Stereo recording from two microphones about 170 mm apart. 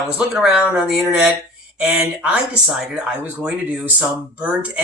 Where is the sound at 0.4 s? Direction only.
5° right (ahead or behind).